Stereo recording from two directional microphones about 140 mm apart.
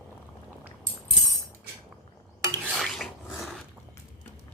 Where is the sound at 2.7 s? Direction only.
Centre (ahead or behind).